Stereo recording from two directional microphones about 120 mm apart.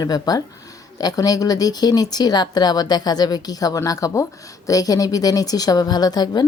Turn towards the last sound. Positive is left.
turn(degrees=35)  # may be behind; listen again after turning